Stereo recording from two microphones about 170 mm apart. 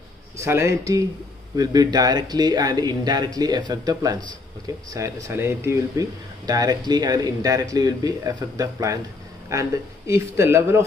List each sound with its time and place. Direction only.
0.4 s speech: 15° right (ahead or behind)